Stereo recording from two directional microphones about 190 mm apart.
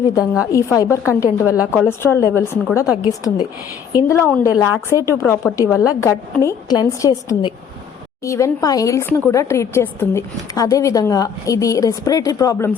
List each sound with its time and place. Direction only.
0.5 s a woman's voice: 15° left (ahead or behind)